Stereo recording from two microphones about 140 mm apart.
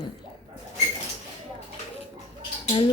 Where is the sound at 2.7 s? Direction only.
35° left (ahead or behind).